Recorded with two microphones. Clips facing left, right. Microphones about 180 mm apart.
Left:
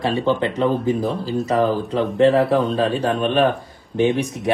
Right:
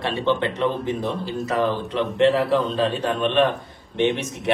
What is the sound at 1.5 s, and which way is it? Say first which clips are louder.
A man's voice: left 3 dB; 40° left (ahead or behind).